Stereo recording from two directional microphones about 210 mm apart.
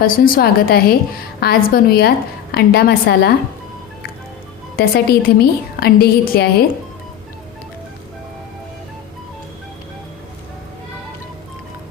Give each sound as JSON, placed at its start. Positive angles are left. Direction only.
{"t": 0.0, "sound": "a woman's voice", "side_deg": 45}
{"t": 4.8, "sound": "a woman's voice", "side_deg": 45}